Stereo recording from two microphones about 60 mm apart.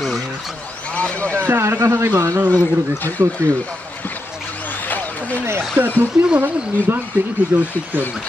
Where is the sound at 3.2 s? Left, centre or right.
Right.